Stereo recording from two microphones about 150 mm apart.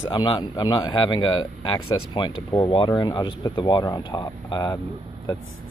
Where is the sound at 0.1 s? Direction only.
30° left (ahead or behind).